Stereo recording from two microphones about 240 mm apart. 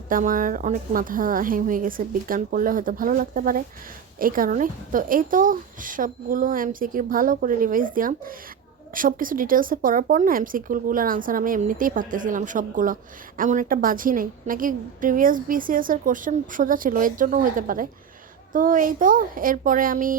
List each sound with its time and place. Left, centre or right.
0.1 s speech: right